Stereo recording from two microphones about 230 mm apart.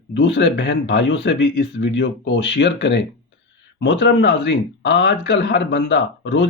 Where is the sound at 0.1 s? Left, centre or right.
Left.